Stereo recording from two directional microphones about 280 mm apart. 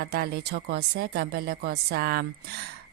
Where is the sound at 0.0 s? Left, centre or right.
Right.